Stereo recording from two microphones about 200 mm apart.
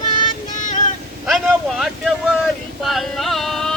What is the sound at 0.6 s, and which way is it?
Vehicle, 40° left (ahead or behind).